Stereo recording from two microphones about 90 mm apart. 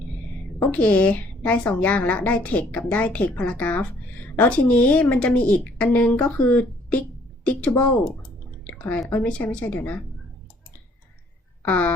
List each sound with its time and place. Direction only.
0.7 s a woman's voice: 15° left (ahead or behind)
8.6 s drip: 15° left (ahead or behind)
9.2 s a woman's voice: 15° left (ahead or behind)
11.6 s a woman's voice: 15° left (ahead or behind)